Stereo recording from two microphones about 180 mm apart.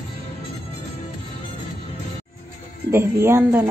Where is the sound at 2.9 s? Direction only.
15° right (ahead or behind).